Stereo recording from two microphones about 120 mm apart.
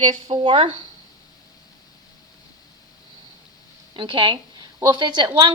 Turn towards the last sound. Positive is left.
turn(degrees=-35)  # may be behind; listen again after turning